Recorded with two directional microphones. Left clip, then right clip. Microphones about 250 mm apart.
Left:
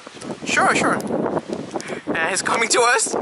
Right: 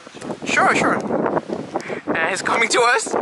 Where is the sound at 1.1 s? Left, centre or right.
Centre.